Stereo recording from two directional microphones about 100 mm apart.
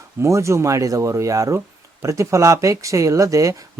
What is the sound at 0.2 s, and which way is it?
Speech, 30° right (ahead or behind).